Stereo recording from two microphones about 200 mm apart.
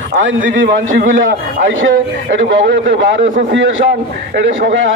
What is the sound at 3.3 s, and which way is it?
Speech, 40° right (ahead or behind).